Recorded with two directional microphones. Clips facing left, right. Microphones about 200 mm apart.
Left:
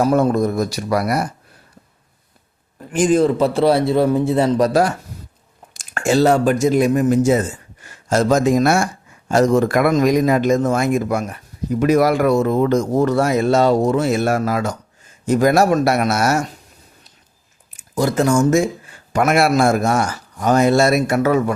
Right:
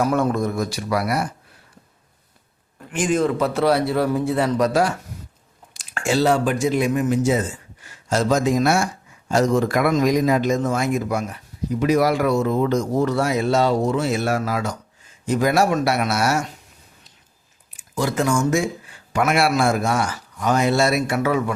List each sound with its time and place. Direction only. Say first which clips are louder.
0.0 s speech: left 4 dB; 35° left (ahead or behind)
2.9 s a man's voice: left 5 dB; 35° left (ahead or behind)
17.7 s a man's voice: left 4 dB; 40° left (ahead or behind)